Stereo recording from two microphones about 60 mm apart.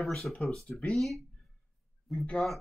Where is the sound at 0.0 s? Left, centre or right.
Centre.